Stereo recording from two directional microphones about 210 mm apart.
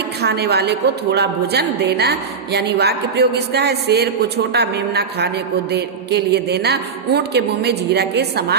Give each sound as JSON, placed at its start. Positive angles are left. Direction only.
{"t": 0.2, "sound": "a woman's voice", "side_deg": -50}